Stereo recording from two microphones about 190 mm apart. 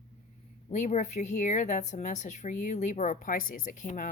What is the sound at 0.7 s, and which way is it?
Speech, 40° left (ahead or behind).